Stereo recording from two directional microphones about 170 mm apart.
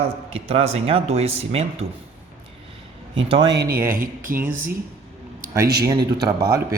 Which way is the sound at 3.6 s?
55° right (ahead or behind).